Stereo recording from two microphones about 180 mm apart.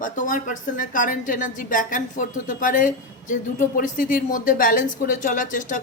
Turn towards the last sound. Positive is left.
turn(degrees=45)  # may be behind; listen again after turning